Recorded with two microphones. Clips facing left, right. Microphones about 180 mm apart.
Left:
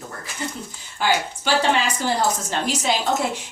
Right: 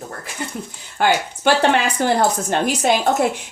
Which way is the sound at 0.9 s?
55° right (ahead or behind).